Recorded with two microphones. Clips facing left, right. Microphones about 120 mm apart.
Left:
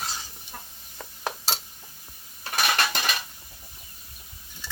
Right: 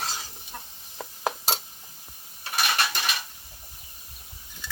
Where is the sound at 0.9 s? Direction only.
25° right (ahead or behind).